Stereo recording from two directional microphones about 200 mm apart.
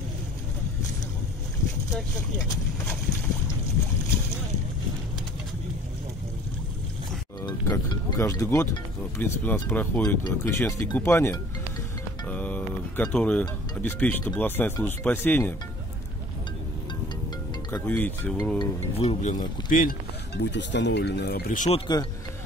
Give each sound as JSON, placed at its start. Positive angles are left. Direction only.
{"t": 7.4, "sound": "music", "side_deg": 15}
{"t": 9.2, "sound": "speech", "side_deg": 10}
{"t": 17.6, "sound": "speech", "side_deg": 10}
{"t": 18.6, "sound": "speech", "side_deg": 30}